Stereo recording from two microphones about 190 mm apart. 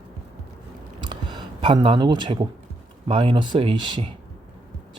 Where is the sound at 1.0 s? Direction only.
25° right (ahead or behind).